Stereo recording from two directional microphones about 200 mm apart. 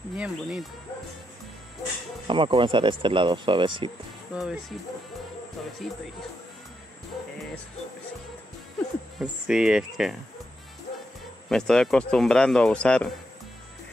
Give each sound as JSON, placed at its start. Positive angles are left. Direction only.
{"t": 0.1, "sound": "speech", "side_deg": -5}
{"t": 2.2, "sound": "speech", "side_deg": -25}
{"t": 4.3, "sound": "speech", "side_deg": 0}
{"t": 5.8, "sound": "speech", "side_deg": 0}
{"t": 9.2, "sound": "speech", "side_deg": -5}
{"t": 11.4, "sound": "speech", "side_deg": 0}